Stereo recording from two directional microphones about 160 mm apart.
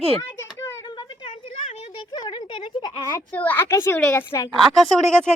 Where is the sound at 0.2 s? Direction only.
20° left (ahead or behind).